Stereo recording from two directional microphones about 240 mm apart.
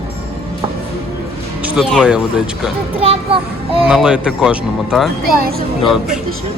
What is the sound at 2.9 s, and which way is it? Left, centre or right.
Speech, right.